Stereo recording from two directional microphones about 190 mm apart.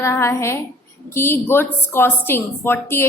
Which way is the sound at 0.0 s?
15° left (ahead or behind).